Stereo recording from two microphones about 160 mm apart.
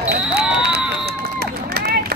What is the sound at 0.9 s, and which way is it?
Run, 90° right.